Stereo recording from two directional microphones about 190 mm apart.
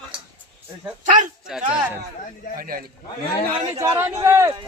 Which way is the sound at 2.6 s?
50° right (ahead or behind).